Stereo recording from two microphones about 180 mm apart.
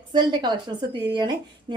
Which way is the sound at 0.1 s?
25° right (ahead or behind).